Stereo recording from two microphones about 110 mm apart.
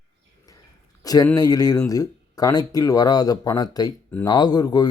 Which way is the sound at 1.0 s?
35° left (ahead or behind).